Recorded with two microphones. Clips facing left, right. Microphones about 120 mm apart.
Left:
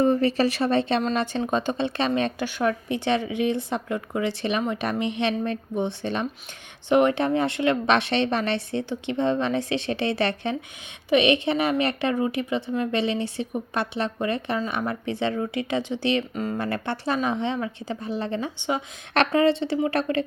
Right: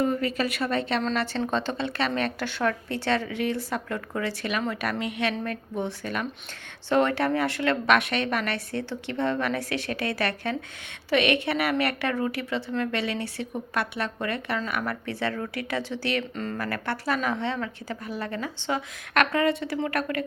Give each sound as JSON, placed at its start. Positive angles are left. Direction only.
{"t": 0.0, "sound": "a woman's voice", "side_deg": 30}
{"t": 16.3, "sound": "a woman's voice", "side_deg": 10}
{"t": 16.6, "sound": "a woman's voice", "side_deg": 25}